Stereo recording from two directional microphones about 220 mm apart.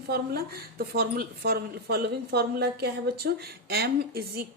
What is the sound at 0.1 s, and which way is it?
A woman's voice, 45° right (ahead or behind).